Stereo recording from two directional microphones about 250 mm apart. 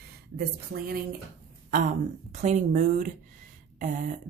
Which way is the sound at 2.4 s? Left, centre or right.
Right.